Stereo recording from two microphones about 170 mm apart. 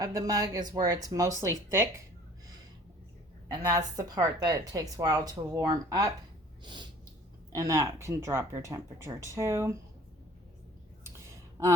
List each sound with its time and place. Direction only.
0.0 s a woman's voice: 20° right (ahead or behind)
3.5 s a woman's voice: 20° right (ahead or behind)
7.5 s speech: 20° right (ahead or behind)
11.3 s a sound: 15° right (ahead or behind)